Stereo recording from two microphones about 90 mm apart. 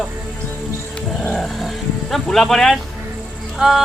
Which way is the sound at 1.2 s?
5° left (ahead or behind).